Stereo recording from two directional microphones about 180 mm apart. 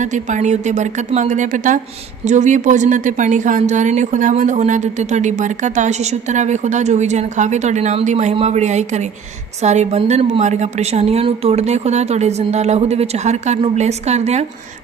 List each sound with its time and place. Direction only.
0.0 s a woman's voice: 40° right (ahead or behind)